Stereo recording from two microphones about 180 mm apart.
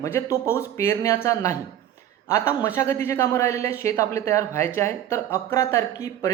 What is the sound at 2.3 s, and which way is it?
Speech, 15° left (ahead or behind).